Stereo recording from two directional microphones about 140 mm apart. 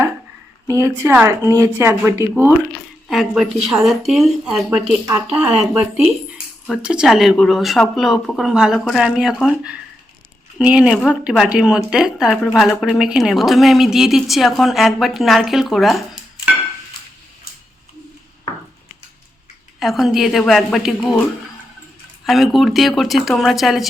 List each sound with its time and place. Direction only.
0.7 s speech: 20° right (ahead or behind)
3.1 s speech: centre (ahead or behind)
6.3 s speech: 5° right (ahead or behind)
19.8 s speech: centre (ahead or behind)
22.3 s speech: centre (ahead or behind)